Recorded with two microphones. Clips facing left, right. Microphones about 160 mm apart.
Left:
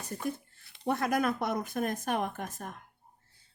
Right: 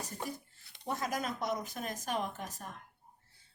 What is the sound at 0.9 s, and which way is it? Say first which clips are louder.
Speech: left 7 dB; 60° left (ahead or behind).